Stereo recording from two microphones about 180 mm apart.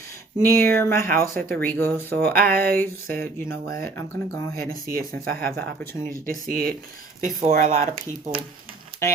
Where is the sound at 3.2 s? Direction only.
10° left (ahead or behind).